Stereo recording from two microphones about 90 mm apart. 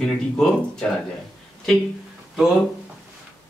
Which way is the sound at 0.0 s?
5° left (ahead or behind).